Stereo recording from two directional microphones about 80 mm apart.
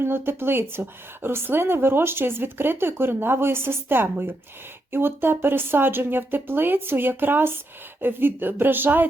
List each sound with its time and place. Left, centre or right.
0.0 s a woman's voice: right